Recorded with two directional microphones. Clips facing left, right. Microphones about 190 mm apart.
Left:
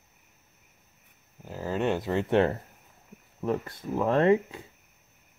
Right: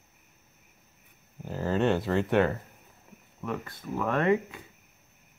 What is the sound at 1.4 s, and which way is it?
Speech, 5° left (ahead or behind).